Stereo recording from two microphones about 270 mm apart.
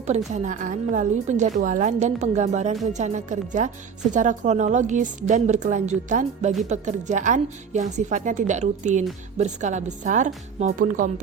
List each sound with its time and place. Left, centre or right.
0.3 s a woman's voice: right